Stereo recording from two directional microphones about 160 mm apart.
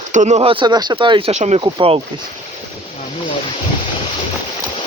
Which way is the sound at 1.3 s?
45° right (ahead or behind).